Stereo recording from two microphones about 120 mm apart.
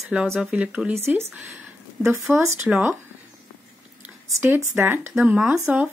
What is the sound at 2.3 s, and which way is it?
Speech, 10° right (ahead or behind).